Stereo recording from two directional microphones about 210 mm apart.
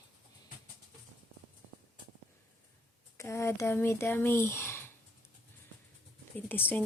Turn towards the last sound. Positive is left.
turn(degrees=10)  # may be behind; listen again after turning